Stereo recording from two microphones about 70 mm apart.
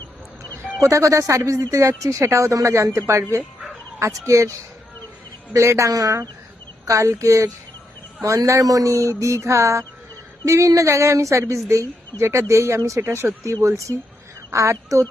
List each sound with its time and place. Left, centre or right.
0.4 s a sound: left
0.8 s speech: right
4.0 s speech: right
5.5 s speech: right